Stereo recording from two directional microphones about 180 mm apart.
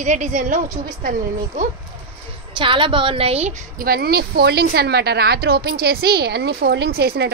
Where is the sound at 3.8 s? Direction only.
60° right (ahead or behind).